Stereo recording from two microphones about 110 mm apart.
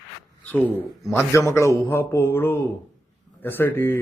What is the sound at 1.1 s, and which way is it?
Speech, 25° left (ahead or behind).